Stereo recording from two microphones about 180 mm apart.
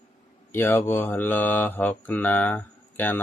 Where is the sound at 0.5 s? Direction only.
15° left (ahead or behind).